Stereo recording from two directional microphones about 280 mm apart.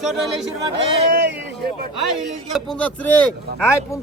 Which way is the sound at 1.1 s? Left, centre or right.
Right.